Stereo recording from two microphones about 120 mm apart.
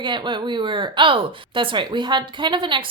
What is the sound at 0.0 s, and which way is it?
Speech, 40° right (ahead or behind).